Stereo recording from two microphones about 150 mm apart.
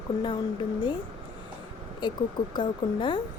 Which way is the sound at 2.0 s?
30° left (ahead or behind).